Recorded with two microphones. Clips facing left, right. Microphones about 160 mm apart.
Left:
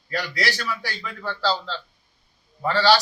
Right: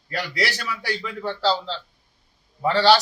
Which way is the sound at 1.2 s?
20° right (ahead or behind).